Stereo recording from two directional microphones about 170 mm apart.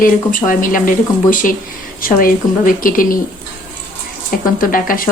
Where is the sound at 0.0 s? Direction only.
55° left (ahead or behind).